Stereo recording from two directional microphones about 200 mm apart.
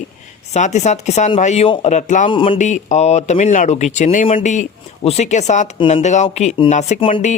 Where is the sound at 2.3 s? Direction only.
25° left (ahead or behind).